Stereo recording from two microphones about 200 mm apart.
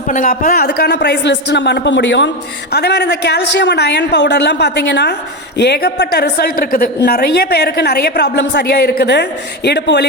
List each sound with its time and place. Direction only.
0.1 s a woman's voice: 40° left (ahead or behind); by 10.1 s 60° left (ahead or behind)